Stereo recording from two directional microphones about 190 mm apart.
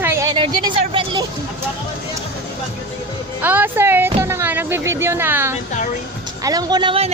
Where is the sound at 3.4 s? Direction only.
10° right (ahead or behind); by 7.1 s 25° right (ahead or behind).